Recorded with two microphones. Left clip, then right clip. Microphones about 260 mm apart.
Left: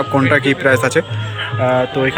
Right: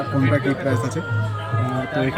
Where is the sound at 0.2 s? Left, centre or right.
Centre.